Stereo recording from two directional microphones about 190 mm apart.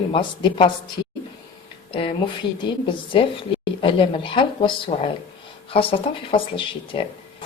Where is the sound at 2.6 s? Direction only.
25° left (ahead or behind).